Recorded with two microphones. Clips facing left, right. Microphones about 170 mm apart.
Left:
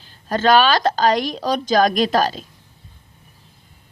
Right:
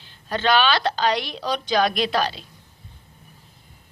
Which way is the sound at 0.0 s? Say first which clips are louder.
Left 5 dB; 45° left (ahead or behind).